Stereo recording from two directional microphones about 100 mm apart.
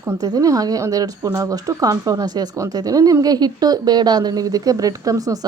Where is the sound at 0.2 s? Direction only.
40° right (ahead or behind).